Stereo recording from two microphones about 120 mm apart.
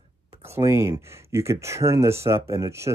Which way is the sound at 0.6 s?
20° right (ahead or behind).